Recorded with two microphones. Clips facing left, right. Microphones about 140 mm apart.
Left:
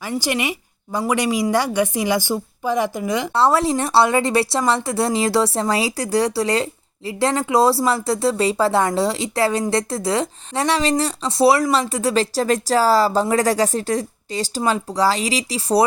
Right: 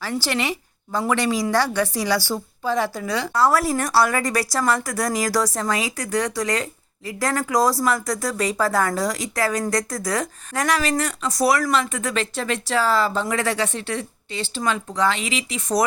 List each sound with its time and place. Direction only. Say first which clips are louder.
0.0 s a woman's voice: left 2 dB; 15° left (ahead or behind); by 15.8 s 35° left (ahead or behind)